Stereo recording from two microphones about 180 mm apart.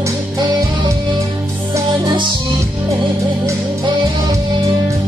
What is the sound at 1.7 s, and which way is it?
Music, 25° right (ahead or behind).